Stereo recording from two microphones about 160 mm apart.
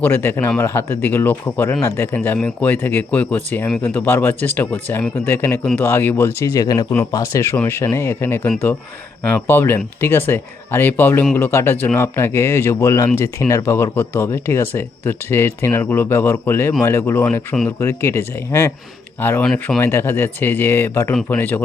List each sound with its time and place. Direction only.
0.0 s a man's voice: 15° left (ahead or behind)
17.2 s speech: 5° left (ahead or behind)
17.7 s a man's voice: 15° left (ahead or behind)